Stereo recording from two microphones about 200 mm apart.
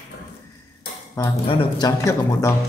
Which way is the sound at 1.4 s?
20° left (ahead or behind).